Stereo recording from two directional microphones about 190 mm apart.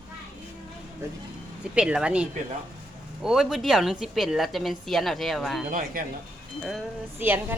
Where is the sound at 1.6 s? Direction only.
5° right (ahead or behind).